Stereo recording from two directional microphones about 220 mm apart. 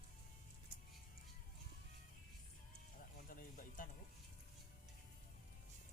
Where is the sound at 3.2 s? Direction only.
40° left (ahead or behind).